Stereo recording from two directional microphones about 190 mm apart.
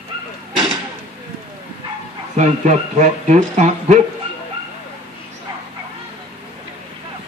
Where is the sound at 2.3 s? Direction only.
40° right (ahead or behind).